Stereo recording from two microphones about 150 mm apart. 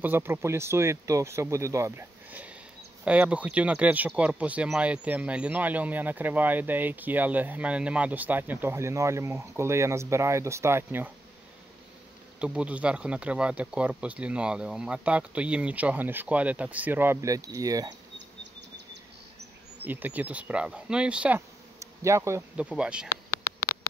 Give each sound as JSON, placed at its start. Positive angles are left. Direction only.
{"t": 0.0, "sound": "speech", "side_deg": -15}
{"t": 12.4, "sound": "speech", "side_deg": -5}
{"t": 19.8, "sound": "speech", "side_deg": -10}
{"t": 21.7, "sound": "bee", "side_deg": -20}
{"t": 22.6, "sound": "speech", "side_deg": -5}